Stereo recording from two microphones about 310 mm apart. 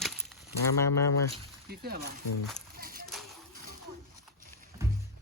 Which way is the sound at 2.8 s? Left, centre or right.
Right.